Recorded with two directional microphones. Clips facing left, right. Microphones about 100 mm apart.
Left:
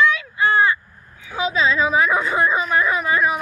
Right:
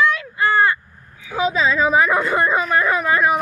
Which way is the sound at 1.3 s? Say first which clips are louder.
Right 1 dB; 40° right (ahead or behind).